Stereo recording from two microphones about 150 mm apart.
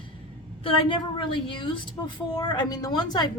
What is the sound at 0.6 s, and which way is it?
A woman's voice, 35° left (ahead or behind).